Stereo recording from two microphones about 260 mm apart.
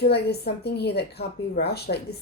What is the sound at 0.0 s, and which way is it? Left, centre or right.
A woman's voice, left.